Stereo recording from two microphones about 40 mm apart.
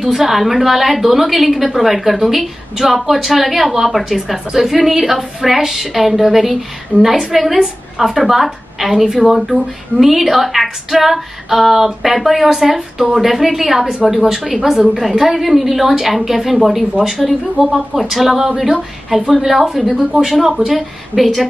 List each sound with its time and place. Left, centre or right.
0.0 s a woman's voice: centre
20.0 s speech: centre
20.2 s a woman's voice: centre